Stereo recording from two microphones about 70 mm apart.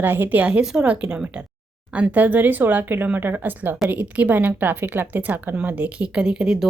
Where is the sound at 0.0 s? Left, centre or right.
Right.